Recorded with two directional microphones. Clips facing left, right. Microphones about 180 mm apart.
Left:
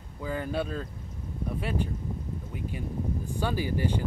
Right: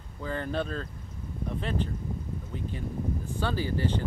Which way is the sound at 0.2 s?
10° left (ahead or behind).